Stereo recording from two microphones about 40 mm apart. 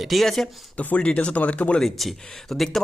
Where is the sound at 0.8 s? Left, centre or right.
Left.